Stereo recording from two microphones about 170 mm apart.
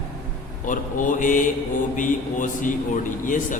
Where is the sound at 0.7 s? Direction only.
50° left (ahead or behind).